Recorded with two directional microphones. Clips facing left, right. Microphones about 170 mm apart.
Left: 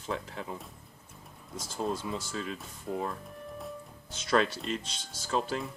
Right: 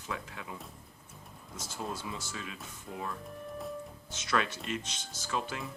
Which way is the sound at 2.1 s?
35° left (ahead or behind).